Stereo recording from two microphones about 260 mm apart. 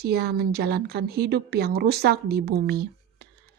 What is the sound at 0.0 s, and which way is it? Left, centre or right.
A woman's voice, right.